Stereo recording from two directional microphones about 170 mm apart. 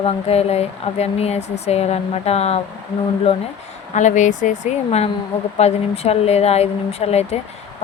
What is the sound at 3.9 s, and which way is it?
A woman's voice, 45° left (ahead or behind).